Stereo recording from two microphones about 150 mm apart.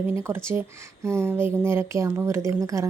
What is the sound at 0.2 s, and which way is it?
A woman's voice, 15° right (ahead or behind).